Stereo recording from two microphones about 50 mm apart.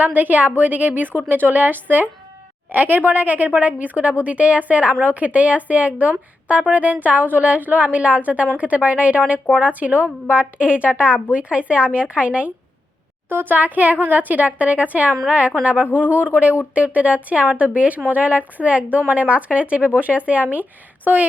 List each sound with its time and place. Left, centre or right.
0.0 s a woman's voice: right
13.3 s a woman's voice: right